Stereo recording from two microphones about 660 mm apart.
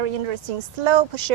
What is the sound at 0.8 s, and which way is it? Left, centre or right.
Speech, right.